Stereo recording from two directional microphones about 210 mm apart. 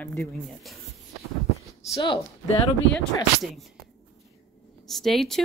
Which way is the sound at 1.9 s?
20° left (ahead or behind).